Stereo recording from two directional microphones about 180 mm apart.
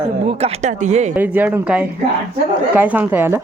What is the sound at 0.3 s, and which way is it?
Speech, 35° right (ahead or behind).